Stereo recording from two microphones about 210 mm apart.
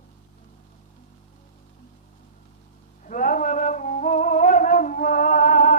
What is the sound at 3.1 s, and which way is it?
Music, 40° left (ahead or behind).